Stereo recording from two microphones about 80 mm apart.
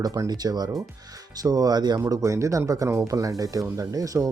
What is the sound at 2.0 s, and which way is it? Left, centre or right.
Speech, right.